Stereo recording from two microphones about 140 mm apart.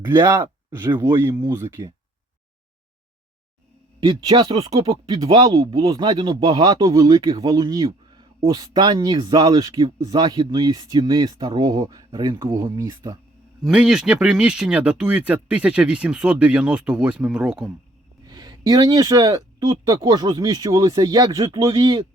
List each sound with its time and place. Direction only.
0.2 s speech: 30° right (ahead or behind)
0.8 s speech: 15° right (ahead or behind)
4.0 s speech: 35° right (ahead or behind)
5.1 s speech: 25° right (ahead or behind)
13.7 s speech: 5° right (ahead or behind)
18.3 s speech: 30° right (ahead or behind)